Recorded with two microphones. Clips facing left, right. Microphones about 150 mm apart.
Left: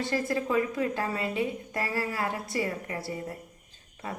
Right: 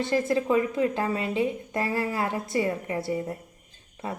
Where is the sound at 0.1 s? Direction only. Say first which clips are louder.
Right 5 dB; 20° right (ahead or behind).